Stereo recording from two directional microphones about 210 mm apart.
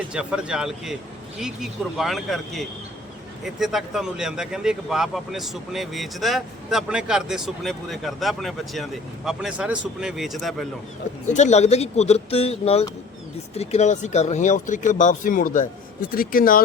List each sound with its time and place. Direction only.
0.1 s speech: 5° right (ahead or behind)
11.3 s speech: 35° left (ahead or behind)